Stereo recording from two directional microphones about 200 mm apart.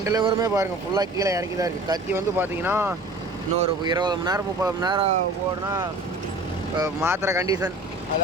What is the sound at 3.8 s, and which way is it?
Speech, 20° right (ahead or behind).